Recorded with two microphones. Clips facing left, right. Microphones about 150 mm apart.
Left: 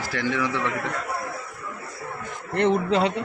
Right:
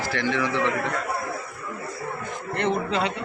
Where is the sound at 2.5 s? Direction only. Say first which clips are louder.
Left 4 dB; 40° left (ahead or behind).